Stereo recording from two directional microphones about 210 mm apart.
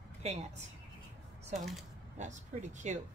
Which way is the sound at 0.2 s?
30° right (ahead or behind).